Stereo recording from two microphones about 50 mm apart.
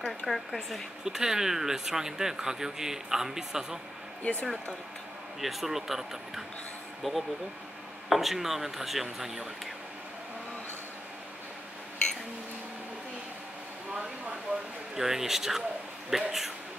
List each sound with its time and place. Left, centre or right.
0.2 s speech: right
0.6 s a woman's voice: centre
1.0 s speech: centre
4.2 s speech: left
5.4 s speech: centre
15.0 s speech: centre